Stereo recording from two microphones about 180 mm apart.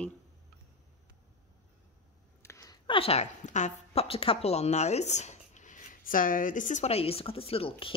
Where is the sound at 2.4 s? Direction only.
15° left (ahead or behind).